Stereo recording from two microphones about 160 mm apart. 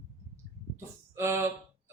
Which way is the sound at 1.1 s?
15° right (ahead or behind).